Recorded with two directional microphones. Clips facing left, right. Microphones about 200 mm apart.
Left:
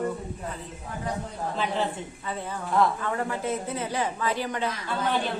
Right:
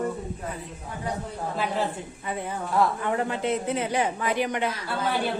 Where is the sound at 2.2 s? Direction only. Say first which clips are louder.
Right 3 dB; 15° right (ahead or behind).